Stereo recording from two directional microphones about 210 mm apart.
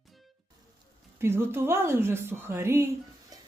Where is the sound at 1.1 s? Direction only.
10° right (ahead or behind).